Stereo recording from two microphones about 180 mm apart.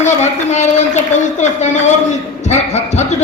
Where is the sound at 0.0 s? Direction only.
40° left (ahead or behind).